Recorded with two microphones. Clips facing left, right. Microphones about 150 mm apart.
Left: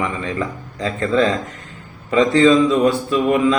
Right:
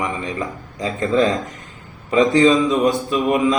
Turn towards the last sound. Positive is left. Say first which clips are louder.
# left 1 dB
turn(degrees=-20)  # may be behind; listen again after turning